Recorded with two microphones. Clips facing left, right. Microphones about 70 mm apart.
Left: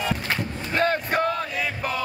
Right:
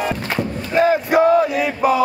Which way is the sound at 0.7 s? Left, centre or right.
Centre.